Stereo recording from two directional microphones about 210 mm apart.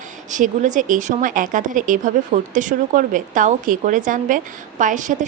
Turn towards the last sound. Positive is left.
turn(degrees=-35)  # may be behind; listen again after turning